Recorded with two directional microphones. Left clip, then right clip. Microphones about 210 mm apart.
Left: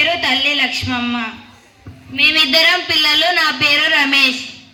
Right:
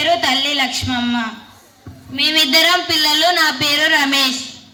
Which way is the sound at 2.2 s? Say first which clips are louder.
Left 2 dB; 60° right (ahead or behind).